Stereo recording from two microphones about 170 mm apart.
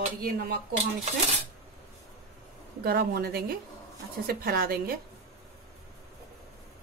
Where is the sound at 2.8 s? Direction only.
65° right (ahead or behind).